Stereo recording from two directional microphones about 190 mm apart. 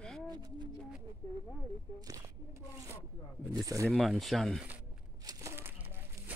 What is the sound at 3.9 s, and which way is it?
Speech, centre (ahead or behind).